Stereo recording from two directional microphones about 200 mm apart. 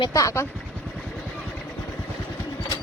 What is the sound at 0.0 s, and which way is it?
Speech, 15° left (ahead or behind).